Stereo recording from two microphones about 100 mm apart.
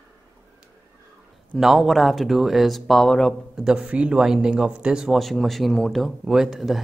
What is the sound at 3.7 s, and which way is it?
Speech, 10° right (ahead or behind).